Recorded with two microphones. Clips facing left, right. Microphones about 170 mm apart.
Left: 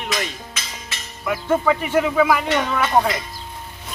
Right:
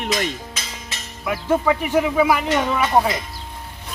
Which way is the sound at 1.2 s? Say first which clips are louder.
Even; 10° right (ahead or behind).